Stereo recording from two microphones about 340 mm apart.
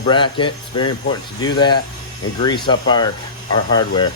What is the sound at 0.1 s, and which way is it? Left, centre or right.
Speech, centre.